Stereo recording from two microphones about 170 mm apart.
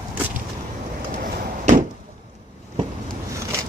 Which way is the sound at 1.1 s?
50° right (ahead or behind).